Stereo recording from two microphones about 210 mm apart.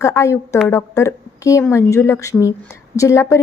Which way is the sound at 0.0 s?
15° left (ahead or behind).